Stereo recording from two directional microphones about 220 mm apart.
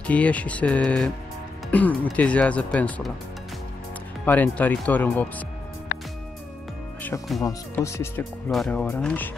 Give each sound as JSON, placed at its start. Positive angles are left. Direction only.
{"t": 0.0, "sound": "speech", "side_deg": 5}
{"t": 4.3, "sound": "speech", "side_deg": 10}
{"t": 5.9, "sound": "music", "side_deg": 45}
{"t": 7.0, "sound": "speech", "side_deg": 5}